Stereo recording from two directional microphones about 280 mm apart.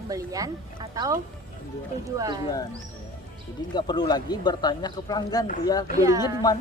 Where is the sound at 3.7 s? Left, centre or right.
Centre.